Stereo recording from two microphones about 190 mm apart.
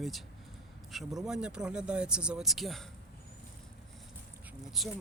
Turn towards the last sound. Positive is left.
turn(degrees=0)  # may be behind; listen again after turning